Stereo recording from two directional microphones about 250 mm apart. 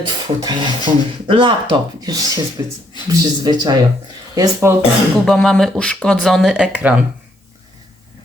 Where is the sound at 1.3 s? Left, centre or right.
Centre.